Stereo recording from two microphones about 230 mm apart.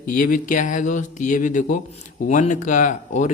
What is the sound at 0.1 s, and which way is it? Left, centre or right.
Speech, left.